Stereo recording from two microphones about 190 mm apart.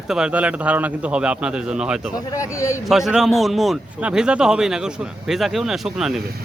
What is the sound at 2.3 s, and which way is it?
Speech, 15° left (ahead or behind).